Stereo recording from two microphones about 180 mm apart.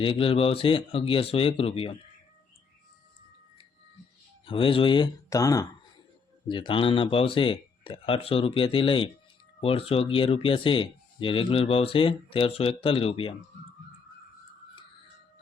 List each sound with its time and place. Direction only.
0.0 s speech: 30° left (ahead or behind)
4.4 s speech: 30° left (ahead or behind)